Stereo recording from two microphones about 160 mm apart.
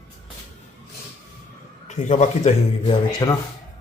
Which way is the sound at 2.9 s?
25° left (ahead or behind).